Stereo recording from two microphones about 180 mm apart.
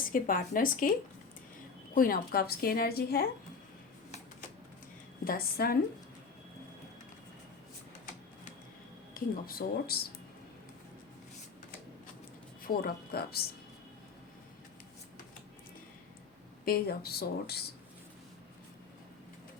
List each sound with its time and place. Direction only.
0.1 s speech: 50° left (ahead or behind)
2.0 s a woman's voice: 50° left (ahead or behind)
5.2 s a woman's voice: 55° left (ahead or behind)
9.1 s a woman's voice: 55° left (ahead or behind)
12.6 s speech: 55° left (ahead or behind)
16.6 s a woman's voice: 55° left (ahead or behind)